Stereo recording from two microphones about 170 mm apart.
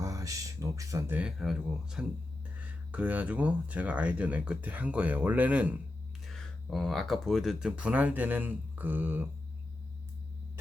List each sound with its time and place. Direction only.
0.0 s speech: 20° right (ahead or behind)